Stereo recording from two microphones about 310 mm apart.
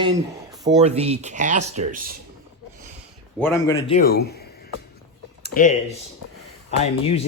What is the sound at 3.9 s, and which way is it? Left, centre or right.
Speech, left.